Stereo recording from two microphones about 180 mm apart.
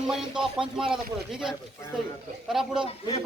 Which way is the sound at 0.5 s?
5° right (ahead or behind).